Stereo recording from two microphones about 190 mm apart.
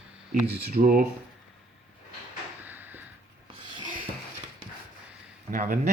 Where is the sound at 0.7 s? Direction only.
45° right (ahead or behind).